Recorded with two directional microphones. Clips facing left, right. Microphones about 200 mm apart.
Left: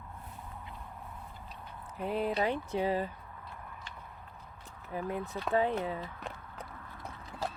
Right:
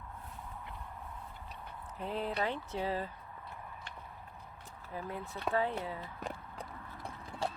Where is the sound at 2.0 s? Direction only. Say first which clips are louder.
Left 4 dB; 10° left (ahead or behind).